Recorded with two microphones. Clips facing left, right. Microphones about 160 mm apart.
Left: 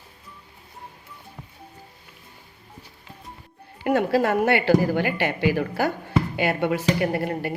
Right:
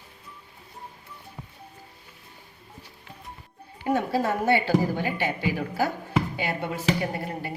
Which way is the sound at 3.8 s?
75° left (ahead or behind).